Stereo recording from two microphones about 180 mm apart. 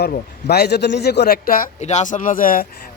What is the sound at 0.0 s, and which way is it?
A man's voice, 65° left (ahead or behind).